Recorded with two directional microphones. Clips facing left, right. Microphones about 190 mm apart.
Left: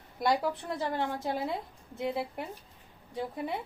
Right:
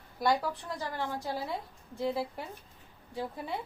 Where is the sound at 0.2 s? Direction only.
20° left (ahead or behind).